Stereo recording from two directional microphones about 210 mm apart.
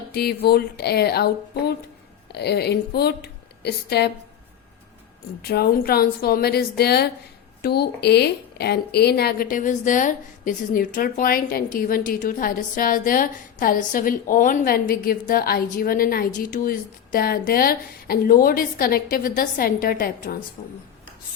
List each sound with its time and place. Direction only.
0.1 s a woman's voice: 50° left (ahead or behind)
5.4 s a woman's voice: 50° left (ahead or behind)